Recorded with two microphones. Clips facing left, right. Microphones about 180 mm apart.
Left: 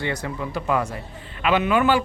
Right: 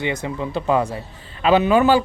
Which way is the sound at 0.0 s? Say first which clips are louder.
Right 3 dB; 20° right (ahead or behind).